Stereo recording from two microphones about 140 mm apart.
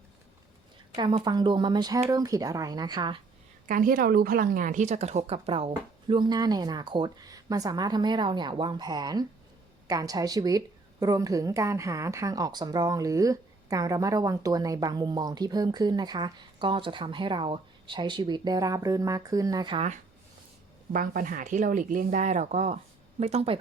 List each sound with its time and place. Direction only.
0.9 s a woman's voice: 30° right (ahead or behind)
3.7 s a woman's voice: 85° right; by 19.8 s 30° right (ahead or behind)
20.9 s a woman's voice: 80° right; by 23.6 s 45° right (ahead or behind)